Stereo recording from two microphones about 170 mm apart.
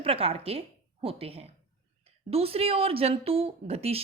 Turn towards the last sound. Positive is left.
turn(degrees=-35)  # may be behind; listen again after turning